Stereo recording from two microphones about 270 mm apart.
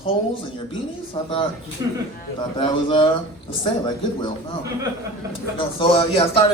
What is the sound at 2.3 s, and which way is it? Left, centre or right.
Speech, centre.